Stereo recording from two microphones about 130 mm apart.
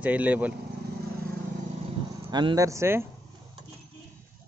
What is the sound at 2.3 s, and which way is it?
Speech, 30° right (ahead or behind).